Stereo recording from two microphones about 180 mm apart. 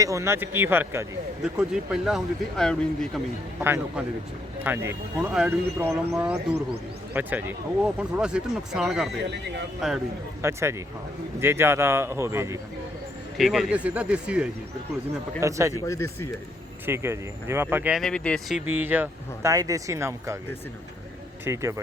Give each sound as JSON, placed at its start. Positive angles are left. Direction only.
{"t": 0.0, "sound": "speech", "side_deg": -15}
{"t": 3.6, "sound": "speech", "side_deg": -10}
{"t": 9.3, "sound": "speech", "side_deg": -70}
{"t": 10.4, "sound": "speech", "side_deg": -15}
{"t": 13.3, "sound": "speech", "side_deg": 0}
{"t": 15.7, "sound": "speech", "side_deg": 15}
{"t": 16.8, "sound": "speech", "side_deg": -15}
{"t": 18.7, "sound": "speech", "side_deg": -10}
{"t": 21.4, "sound": "speech", "side_deg": -15}